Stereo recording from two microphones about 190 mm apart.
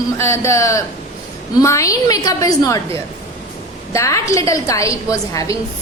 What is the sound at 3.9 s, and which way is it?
A woman's voice, 15° left (ahead or behind).